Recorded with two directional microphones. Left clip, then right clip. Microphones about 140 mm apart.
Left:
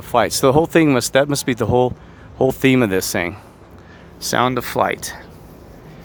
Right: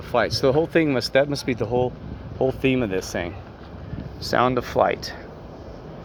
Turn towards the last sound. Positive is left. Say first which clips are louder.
# left 2 dB
turn(degrees=50)  # may be behind; listen again after turning